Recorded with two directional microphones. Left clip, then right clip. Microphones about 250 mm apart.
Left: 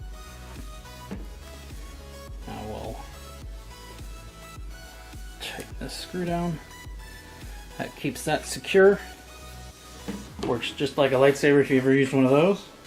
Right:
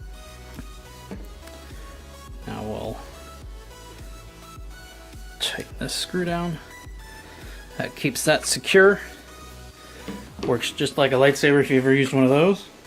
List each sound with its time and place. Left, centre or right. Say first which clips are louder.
5.4 s music: right 8 dB; right
7.8 s speech: right 5 dB; right
10.5 s speech: right 4 dB; right